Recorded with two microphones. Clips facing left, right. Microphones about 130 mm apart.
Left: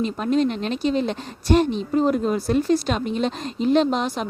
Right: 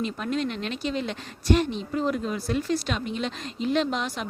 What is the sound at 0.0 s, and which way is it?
Speech, 35° left (ahead or behind).